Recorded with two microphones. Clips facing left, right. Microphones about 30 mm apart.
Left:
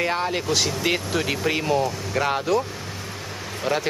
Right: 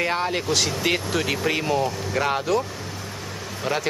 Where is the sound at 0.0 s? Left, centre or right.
Centre.